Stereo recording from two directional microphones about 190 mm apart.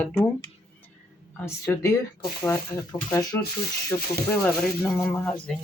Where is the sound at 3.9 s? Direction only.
20° left (ahead or behind).